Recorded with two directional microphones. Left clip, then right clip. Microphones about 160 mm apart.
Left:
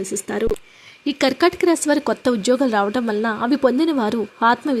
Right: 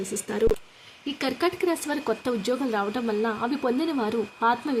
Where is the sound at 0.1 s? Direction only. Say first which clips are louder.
Left 1 dB; 40° left (ahead or behind).